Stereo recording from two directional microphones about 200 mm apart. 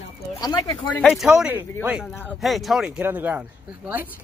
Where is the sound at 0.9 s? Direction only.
5° left (ahead or behind).